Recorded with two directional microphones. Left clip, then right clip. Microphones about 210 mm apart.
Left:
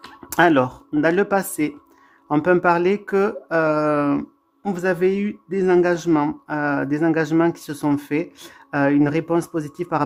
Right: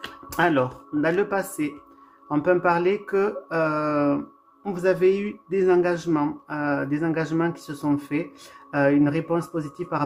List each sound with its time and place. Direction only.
0.3 s speech: 45° left (ahead or behind)